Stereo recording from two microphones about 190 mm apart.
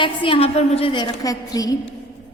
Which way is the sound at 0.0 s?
25° left (ahead or behind).